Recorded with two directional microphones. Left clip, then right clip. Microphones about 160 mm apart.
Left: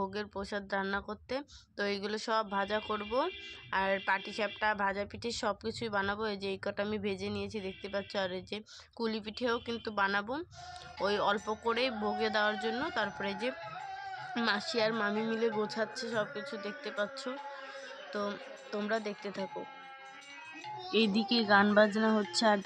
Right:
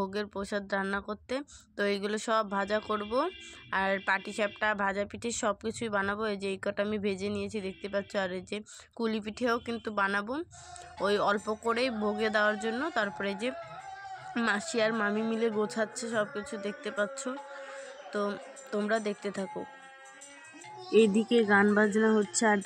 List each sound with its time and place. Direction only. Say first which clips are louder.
0.0 s speech: right 3 dB; 30° right (ahead or behind)
20.9 s speech: right 6 dB; 15° right (ahead or behind)